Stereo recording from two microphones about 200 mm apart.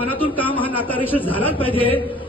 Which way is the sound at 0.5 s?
25° left (ahead or behind).